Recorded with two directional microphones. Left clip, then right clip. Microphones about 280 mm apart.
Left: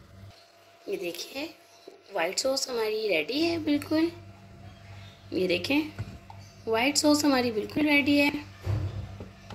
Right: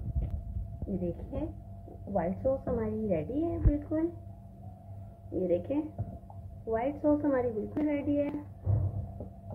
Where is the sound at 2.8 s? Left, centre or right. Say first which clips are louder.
Left 6 dB; left.